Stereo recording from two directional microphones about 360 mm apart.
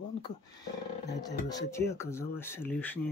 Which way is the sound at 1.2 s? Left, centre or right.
Centre.